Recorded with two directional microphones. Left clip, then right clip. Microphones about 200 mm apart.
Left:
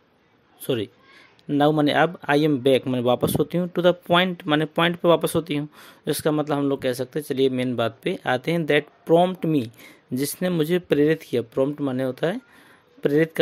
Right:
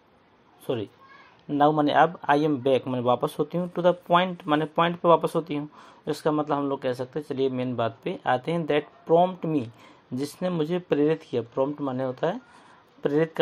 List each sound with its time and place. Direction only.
0.7 s a man's voice: 50° left (ahead or behind)